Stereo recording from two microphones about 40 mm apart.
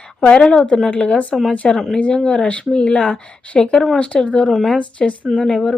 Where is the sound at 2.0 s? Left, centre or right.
Left.